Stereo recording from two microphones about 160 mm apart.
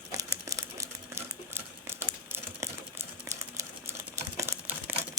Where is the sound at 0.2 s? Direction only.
20° right (ahead or behind).